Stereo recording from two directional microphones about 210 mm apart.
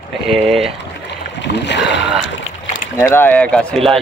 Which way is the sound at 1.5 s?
55° left (ahead or behind).